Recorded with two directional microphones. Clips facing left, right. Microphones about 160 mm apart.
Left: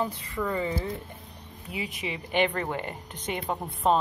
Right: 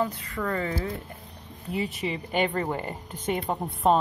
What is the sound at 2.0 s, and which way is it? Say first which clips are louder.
Speech: right 1 dB; 5° left (ahead or behind).